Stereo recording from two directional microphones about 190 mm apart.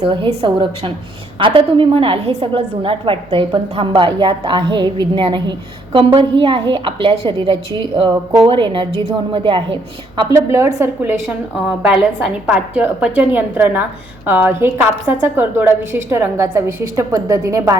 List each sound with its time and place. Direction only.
0.0 s a woman's voice: 25° right (ahead or behind)
10.3 s a woman's voice: 15° right (ahead or behind)
11.8 s a woman's voice: 5° right (ahead or behind)